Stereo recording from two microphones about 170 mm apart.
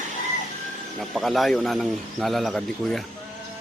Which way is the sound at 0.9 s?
Centre (ahead or behind).